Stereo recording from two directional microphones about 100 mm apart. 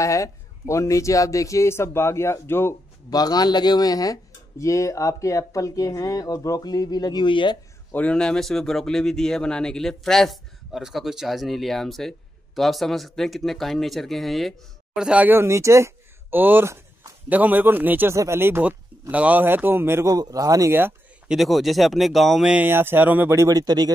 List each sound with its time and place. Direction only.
0.0 s speech: 35° left (ahead or behind)
3.1 s speech: 40° left (ahead or behind)
7.9 s speech: 10° left (ahead or behind)
15.0 s speech: 10° right (ahead or behind)
20.2 s speech: 35° right (ahead or behind)
21.3 s speech: centre (ahead or behind)
22.5 s speech: 20° right (ahead or behind); by 23.9 s 40° right (ahead or behind)